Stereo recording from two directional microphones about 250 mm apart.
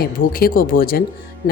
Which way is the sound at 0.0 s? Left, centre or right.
Left.